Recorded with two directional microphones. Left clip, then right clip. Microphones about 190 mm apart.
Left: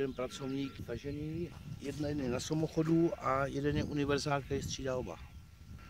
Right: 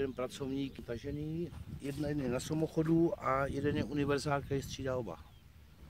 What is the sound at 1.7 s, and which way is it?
Speech, 20° right (ahead or behind).